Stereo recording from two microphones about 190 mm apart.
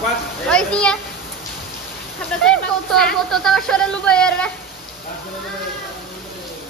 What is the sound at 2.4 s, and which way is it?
Speech, 5° left (ahead or behind).